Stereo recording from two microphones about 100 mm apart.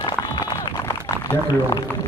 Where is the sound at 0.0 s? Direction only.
40° left (ahead or behind).